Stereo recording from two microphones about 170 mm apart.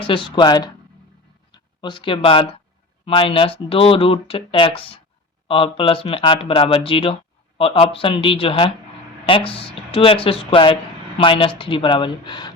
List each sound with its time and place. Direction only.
0.0 s speech: 30° left (ahead or behind)